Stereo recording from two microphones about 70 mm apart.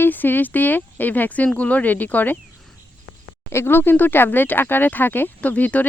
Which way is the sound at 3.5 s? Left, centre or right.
Left.